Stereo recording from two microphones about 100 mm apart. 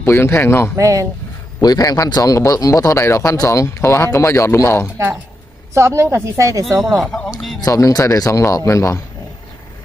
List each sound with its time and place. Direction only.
0.0 s speech: 25° left (ahead or behind)
0.8 s speech: 35° right (ahead or behind)
1.6 s speech: 40° left (ahead or behind)
5.7 s speech: 30° right (ahead or behind)
7.0 s speech: 10° left (ahead or behind)
7.6 s speech: 30° left (ahead or behind)